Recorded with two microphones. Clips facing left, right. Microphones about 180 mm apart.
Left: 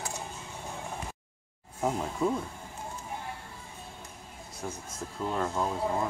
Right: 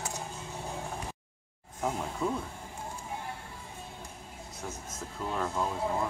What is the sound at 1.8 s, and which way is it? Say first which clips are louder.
Speech: left 3 dB; 10° left (ahead or behind).